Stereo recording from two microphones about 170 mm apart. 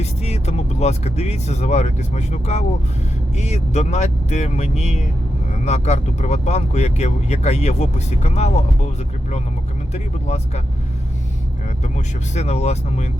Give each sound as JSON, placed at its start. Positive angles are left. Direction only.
{"t": 0.0, "sound": "speech", "side_deg": 40}
{"t": 9.9, "sound": "speech", "side_deg": 40}
{"t": 11.9, "sound": "speech", "side_deg": 45}